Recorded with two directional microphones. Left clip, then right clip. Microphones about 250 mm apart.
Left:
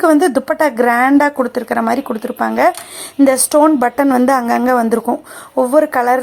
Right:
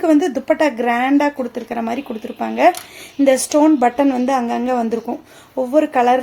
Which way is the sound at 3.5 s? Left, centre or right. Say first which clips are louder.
Left 2 dB; centre.